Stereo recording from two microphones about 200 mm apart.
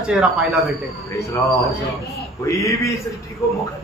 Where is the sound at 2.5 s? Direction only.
15° left (ahead or behind).